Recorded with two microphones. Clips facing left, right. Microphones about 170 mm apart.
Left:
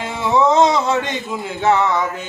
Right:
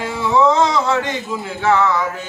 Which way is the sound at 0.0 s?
20° left (ahead or behind).